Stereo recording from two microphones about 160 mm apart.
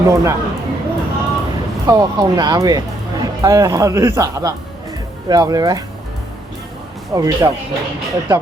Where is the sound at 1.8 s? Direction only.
25° right (ahead or behind).